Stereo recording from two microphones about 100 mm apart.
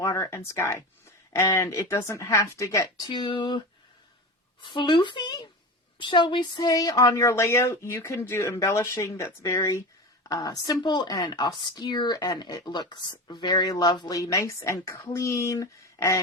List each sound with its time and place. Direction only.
0.0 s speech: 35° left (ahead or behind)
3.1 s speech: 50° left (ahead or behind)
4.6 s speech: 55° left (ahead or behind); by 16.2 s 30° left (ahead or behind)